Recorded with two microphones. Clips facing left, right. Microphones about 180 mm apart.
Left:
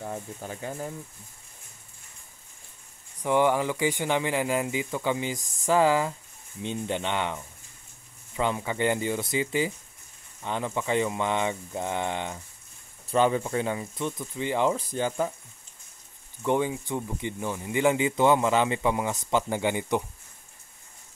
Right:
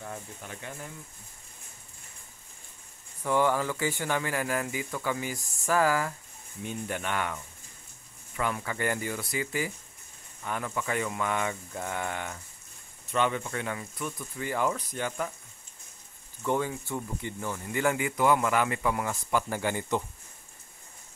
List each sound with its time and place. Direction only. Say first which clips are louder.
0.0 s speech: left 5 dB; 30° left (ahead or behind)
3.2 s speech: left 3 dB; 20° left (ahead or behind)
13.1 s speech: left 5 dB; 35° left (ahead or behind)
16.4 s speech: left 3 dB; 20° left (ahead or behind)